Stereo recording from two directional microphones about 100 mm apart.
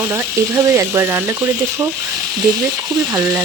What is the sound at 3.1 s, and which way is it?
Speech, 35° right (ahead or behind).